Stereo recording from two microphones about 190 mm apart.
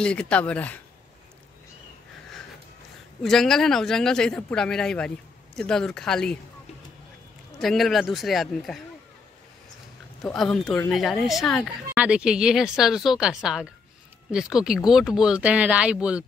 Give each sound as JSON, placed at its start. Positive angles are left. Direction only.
{"t": 0.0, "sound": "speech", "side_deg": 5}
{"t": 3.2, "sound": "speech", "side_deg": 0}
{"t": 7.5, "sound": "speech", "side_deg": 0}
{"t": 10.2, "sound": "speech", "side_deg": 5}